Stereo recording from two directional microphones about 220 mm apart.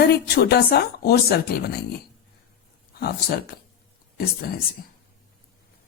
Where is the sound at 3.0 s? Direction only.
45° left (ahead or behind).